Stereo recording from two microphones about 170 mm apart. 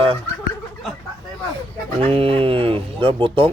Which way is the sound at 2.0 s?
35° right (ahead or behind).